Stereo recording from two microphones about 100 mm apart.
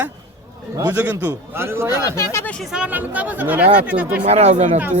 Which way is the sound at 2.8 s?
15° right (ahead or behind).